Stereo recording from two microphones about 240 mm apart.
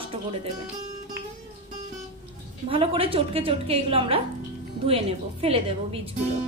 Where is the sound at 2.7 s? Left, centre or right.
Right.